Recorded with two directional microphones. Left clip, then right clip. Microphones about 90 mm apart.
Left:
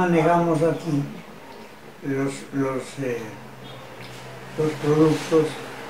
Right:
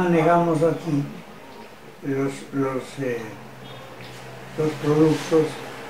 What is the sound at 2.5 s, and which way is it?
Speech, 30° left (ahead or behind).